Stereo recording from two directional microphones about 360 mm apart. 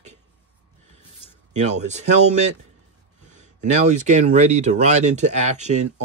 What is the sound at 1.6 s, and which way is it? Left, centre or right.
Speech, centre.